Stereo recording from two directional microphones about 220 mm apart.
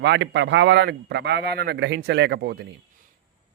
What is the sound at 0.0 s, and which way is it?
Speech, 50° right (ahead or behind).